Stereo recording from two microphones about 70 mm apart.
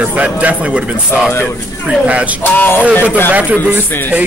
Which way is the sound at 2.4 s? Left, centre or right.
Left.